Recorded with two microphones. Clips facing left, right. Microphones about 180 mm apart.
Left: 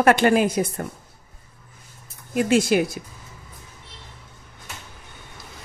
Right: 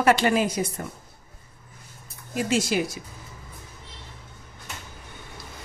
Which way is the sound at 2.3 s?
55° left (ahead or behind).